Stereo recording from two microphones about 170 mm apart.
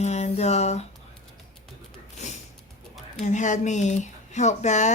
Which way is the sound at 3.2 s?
45° left (ahead or behind).